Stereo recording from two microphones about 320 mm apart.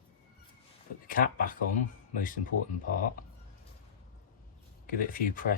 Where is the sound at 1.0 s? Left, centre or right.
Left.